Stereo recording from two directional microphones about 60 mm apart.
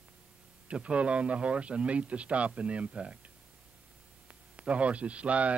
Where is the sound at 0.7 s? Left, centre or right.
Centre.